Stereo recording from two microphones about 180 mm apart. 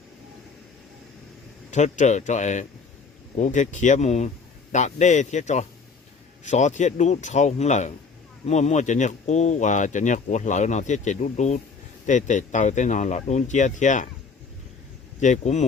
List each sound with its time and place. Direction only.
1.7 s speech: 40° left (ahead or behind)
15.2 s speech: 40° left (ahead or behind)